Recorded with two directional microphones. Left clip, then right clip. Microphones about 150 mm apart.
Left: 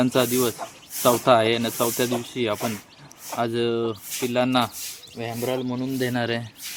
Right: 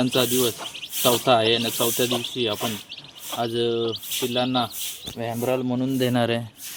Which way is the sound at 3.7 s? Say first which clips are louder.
Right 1 dB; 20° left (ahead or behind).